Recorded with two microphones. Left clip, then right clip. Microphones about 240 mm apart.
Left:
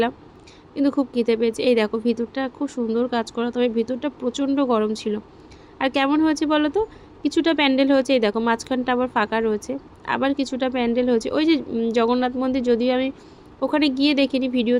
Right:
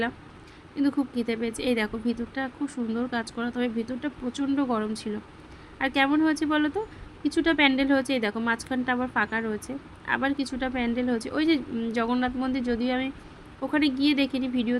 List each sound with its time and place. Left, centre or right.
0.8 s speech: centre